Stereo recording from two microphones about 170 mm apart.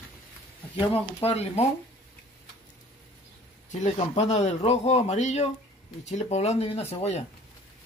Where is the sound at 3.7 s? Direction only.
45° left (ahead or behind).